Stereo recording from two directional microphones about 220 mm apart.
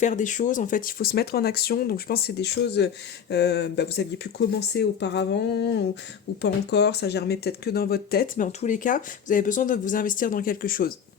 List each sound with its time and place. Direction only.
0.0 s speech: 35° left (ahead or behind)